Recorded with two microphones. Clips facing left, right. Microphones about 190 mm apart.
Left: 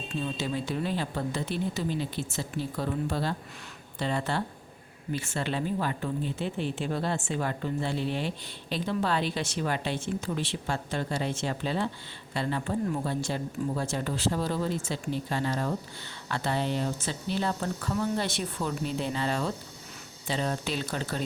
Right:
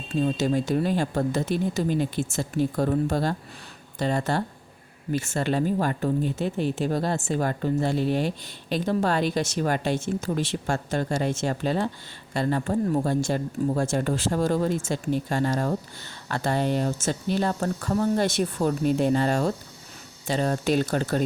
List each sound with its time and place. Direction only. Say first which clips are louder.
0.2 s speech: right 9 dB; 45° right (ahead or behind)